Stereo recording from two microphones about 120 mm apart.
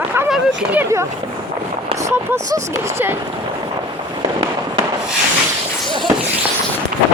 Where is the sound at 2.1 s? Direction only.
25° right (ahead or behind).